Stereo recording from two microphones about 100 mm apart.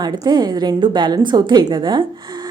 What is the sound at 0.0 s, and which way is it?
A woman's voice, 45° right (ahead or behind).